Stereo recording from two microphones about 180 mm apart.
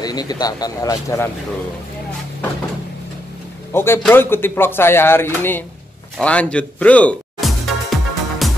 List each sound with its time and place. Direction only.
0.0 s speech: 20° left (ahead or behind)
3.7 s speech: 15° left (ahead or behind)
6.1 s music: 5° left (ahead or behind)